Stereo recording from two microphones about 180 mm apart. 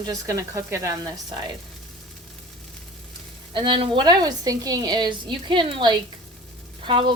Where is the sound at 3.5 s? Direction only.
25° right (ahead or behind).